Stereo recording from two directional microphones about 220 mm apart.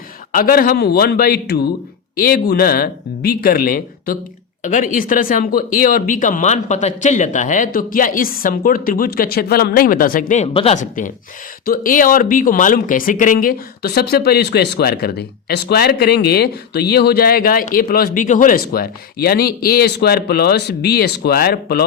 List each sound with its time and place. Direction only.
0.3 s speech: 40° left (ahead or behind)